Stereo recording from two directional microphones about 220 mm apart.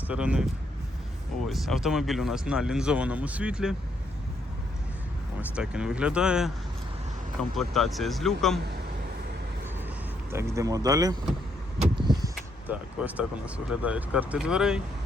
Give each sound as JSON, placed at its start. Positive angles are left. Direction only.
{"t": 0.1, "sound": "speech", "side_deg": -5}
{"t": 1.5, "sound": "speech", "side_deg": 0}
{"t": 5.5, "sound": "speech", "side_deg": -5}
{"t": 7.5, "sound": "speech", "side_deg": 0}
{"t": 10.3, "sound": "speech", "side_deg": -15}
{"t": 11.8, "sound": "vehicle", "side_deg": -20}
{"t": 12.6, "sound": "speech", "side_deg": -5}